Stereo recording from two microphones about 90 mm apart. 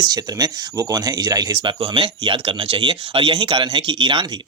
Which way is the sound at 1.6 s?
75° right (ahead or behind).